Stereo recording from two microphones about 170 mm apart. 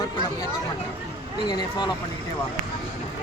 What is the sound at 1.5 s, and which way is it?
Speech, 25° left (ahead or behind).